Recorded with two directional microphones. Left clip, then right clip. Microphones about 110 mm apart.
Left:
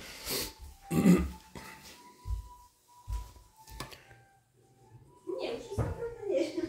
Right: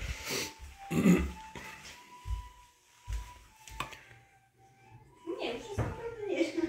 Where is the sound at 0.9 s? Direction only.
25° left (ahead or behind).